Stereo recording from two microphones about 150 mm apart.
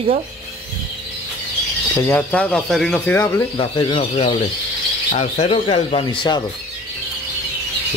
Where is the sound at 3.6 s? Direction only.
35° left (ahead or behind).